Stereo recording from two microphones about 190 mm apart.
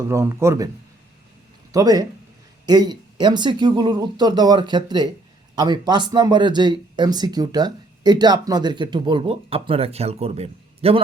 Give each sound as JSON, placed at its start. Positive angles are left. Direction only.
{"t": 0.1, "sound": "speech", "side_deg": -15}
{"t": 1.7, "sound": "speech", "side_deg": -20}